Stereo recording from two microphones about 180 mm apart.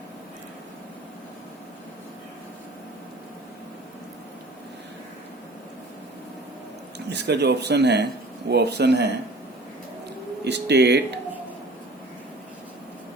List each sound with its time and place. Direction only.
7.1 s speech: 70° right (ahead or behind)
10.4 s speech: 70° right (ahead or behind)